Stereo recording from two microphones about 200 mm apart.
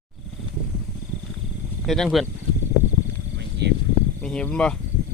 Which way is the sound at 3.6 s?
60° right (ahead or behind).